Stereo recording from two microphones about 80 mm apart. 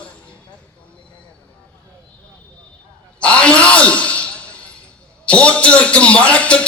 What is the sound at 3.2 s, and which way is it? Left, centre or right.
Sigh, centre.